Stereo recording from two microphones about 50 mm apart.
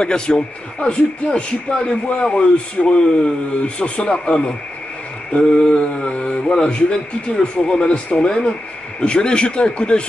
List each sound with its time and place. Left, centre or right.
0.0 s speech: centre
1.9 s speech: left
2.2 s speech: centre